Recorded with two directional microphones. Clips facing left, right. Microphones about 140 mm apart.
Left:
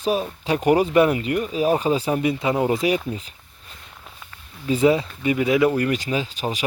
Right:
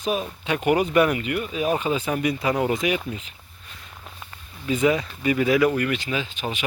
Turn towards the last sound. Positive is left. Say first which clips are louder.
# left 3 dB
turn(degrees=40)  # may be behind; listen again after turning